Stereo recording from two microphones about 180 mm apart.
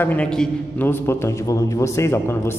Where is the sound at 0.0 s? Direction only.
10° left (ahead or behind).